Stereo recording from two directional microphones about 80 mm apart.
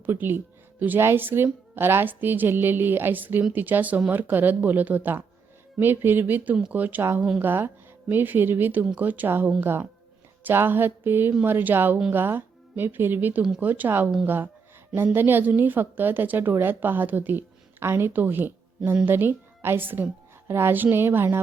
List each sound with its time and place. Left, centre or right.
0.0 s a woman's voice: right
7.2 s a woman's voice: centre
7.4 s a woman's voice: right